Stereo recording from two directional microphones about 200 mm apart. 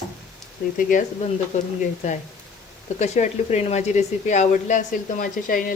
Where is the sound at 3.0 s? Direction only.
35° left (ahead or behind).